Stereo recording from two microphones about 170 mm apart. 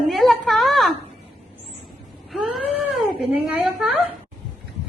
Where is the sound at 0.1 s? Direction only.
Centre (ahead or behind).